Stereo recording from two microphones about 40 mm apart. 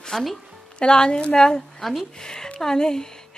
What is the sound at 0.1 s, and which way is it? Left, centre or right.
Speech, centre.